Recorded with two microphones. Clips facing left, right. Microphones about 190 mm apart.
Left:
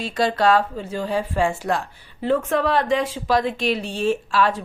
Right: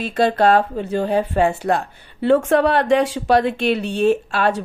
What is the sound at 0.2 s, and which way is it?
Speech, 55° right (ahead or behind).